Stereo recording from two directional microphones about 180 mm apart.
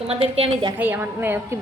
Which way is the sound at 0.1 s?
30° right (ahead or behind).